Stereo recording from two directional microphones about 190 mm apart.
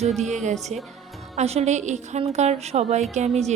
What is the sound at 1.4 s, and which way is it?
A woman's voice, 35° right (ahead or behind).